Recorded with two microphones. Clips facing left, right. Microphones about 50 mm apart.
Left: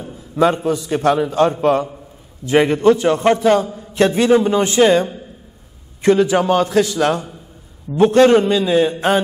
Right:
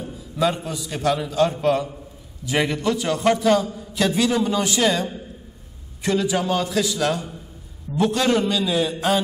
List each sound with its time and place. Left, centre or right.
0.1 s a sound: left
0.7 s a man's voice: left
6.0 s a man's voice: left